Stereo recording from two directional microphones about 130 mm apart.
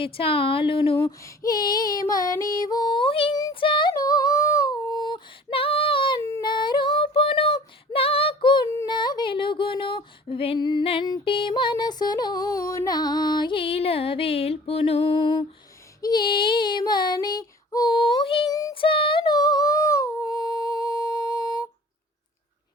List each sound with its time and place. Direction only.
0.0 s speech: 45° left (ahead or behind)
1.4 s female singing: 30° left (ahead or behind)
11.0 s music: 35° left (ahead or behind)
16.0 s child singing: 30° left (ahead or behind)
18.7 s female singing: 40° left (ahead or behind)